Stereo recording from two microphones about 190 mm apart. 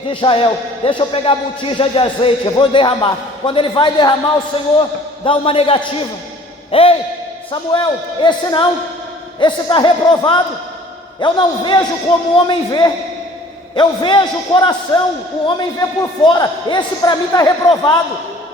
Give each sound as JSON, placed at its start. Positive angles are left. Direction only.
{"t": 0.1, "sound": "a man's voice", "side_deg": 25}